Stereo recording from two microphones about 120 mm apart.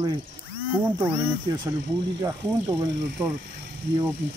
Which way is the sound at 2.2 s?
30° right (ahead or behind).